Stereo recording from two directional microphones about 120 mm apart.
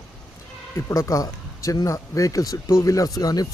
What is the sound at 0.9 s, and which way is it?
A man's voice, 25° left (ahead or behind).